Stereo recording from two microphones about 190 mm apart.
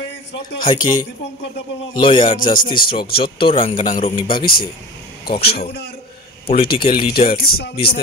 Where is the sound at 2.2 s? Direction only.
45° left (ahead or behind).